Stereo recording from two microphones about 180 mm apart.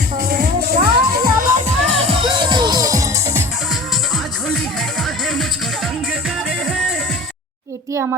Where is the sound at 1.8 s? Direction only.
30° right (ahead or behind); by 3.5 s 15° right (ahead or behind).